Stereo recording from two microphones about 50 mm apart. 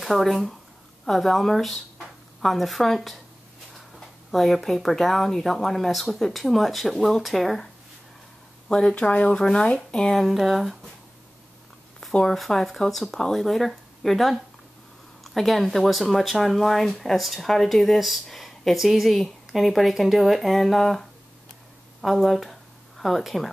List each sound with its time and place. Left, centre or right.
0.0 s speech: centre
4.3 s speech: centre
8.6 s speech: centre
8.9 s speech: left; by 10.2 s centre
10.2 s speech: centre
12.1 s speech: centre
12.4 s speech: centre
22.0 s speech: centre